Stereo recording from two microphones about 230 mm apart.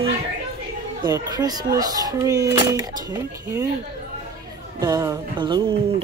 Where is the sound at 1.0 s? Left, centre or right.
Centre.